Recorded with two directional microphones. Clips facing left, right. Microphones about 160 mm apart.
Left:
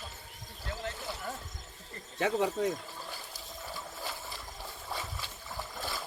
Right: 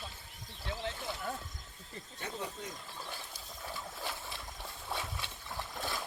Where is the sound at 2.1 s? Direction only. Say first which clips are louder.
Left 13 dB; 90° left.